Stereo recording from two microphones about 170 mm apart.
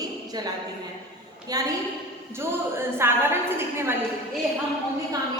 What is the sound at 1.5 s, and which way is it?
A woman's voice, 20° right (ahead or behind).